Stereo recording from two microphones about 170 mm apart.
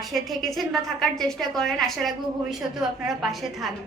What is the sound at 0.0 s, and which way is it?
A woman's voice, centre (ahead or behind).